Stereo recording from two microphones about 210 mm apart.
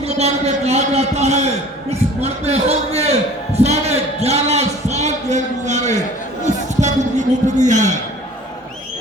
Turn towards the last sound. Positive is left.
turn(degrees=-35)  # may be behind; listen again after turning